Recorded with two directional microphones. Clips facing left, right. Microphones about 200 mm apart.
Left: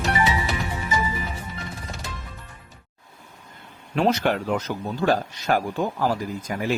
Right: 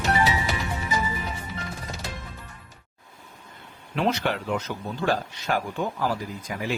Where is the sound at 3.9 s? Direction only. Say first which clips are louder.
Left 4 dB; 45° left (ahead or behind).